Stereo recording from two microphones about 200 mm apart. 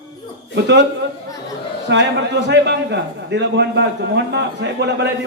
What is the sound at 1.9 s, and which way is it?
A man's voice, 60° right (ahead or behind).